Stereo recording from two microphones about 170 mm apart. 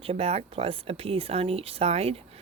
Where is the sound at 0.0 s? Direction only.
35° right (ahead or behind).